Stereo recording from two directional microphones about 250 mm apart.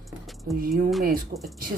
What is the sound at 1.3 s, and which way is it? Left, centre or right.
Speech, right.